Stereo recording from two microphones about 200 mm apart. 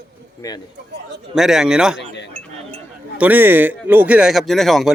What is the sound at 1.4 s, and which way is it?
Speech, centre (ahead or behind).